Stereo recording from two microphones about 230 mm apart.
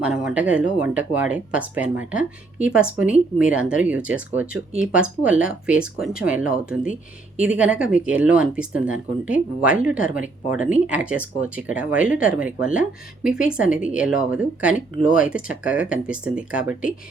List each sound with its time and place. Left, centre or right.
0.0 s speech: centre